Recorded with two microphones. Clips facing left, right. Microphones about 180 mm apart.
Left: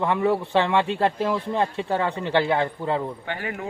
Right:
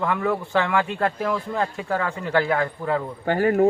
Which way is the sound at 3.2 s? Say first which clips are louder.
Right 12 dB; 40° right (ahead or behind).